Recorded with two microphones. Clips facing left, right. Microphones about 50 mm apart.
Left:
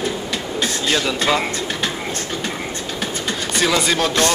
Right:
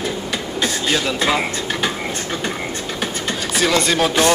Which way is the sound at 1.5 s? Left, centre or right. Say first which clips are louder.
Right 1 dB; right.